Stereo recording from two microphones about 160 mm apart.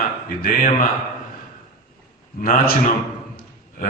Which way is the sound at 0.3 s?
60° left (ahead or behind).